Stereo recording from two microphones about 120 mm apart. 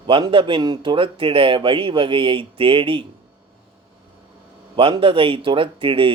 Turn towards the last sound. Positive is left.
turn(degrees=-45)  # may be behind; listen again after turning